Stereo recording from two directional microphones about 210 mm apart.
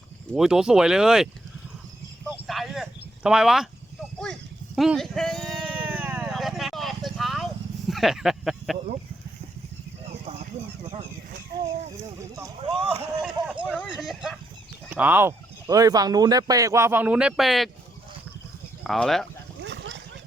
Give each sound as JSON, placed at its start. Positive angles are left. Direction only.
{"t": 0.3, "sound": "speech", "side_deg": -5}
{"t": 4.2, "sound": "cat", "side_deg": 0}
{"t": 12.9, "sound": "speech", "side_deg": -5}
{"t": 18.8, "sound": "speech", "side_deg": 0}
{"t": 19.6, "sound": "a sound", "side_deg": -55}